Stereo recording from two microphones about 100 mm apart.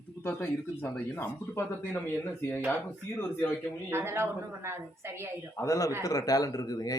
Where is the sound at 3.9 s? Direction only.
25° right (ahead or behind).